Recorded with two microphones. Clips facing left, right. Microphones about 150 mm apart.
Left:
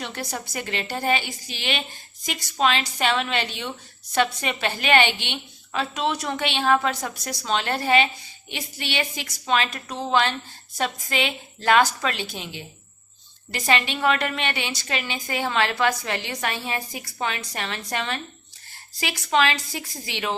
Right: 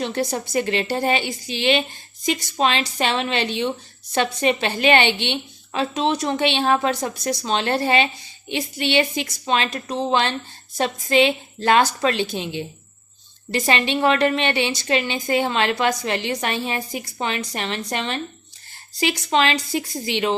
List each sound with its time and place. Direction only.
0.0 s a woman's voice: 25° right (ahead or behind)